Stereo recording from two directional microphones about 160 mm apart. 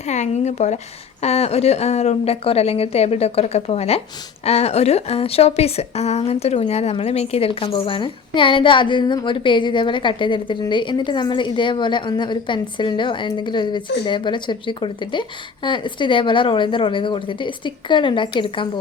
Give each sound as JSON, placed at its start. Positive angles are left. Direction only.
{"t": 0.1, "sound": "a woman's voice", "side_deg": 45}